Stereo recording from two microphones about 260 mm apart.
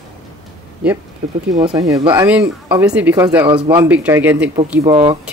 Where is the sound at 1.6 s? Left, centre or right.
Centre.